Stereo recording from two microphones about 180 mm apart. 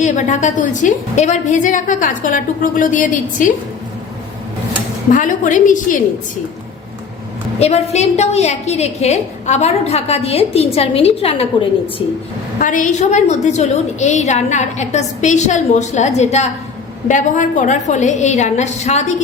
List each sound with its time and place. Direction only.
0.0 s a woman's voice: 40° left (ahead or behind)
5.1 s a woman's voice: 45° left (ahead or behind)
7.6 s a woman's voice: 35° left (ahead or behind)
12.5 s a woman's voice: 45° left (ahead or behind)